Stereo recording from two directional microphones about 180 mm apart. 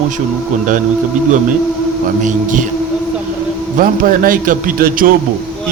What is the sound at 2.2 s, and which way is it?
Speech, 45° right (ahead or behind).